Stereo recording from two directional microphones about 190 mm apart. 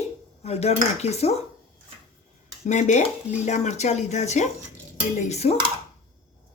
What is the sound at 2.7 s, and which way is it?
A woman's voice, 40° left (ahead or behind).